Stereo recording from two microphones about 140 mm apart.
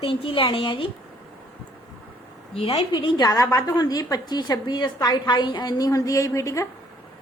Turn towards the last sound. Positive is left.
turn(degrees=20)  # may be behind; listen again after turning